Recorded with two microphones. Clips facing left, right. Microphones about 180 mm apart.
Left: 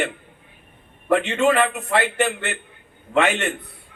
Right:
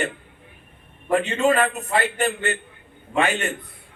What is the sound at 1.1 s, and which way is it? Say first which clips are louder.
A man's voice: left 1 dB; 75° left (ahead or behind).